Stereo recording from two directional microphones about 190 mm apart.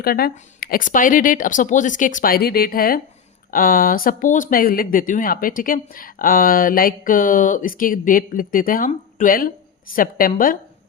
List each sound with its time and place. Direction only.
0.0 s speech: 55° left (ahead or behind)